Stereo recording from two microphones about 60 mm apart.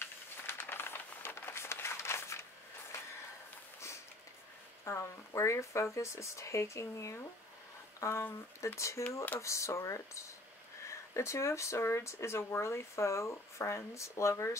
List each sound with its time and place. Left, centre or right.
0.5 s a sound: left
4.8 s speech: left
8.7 s speech: left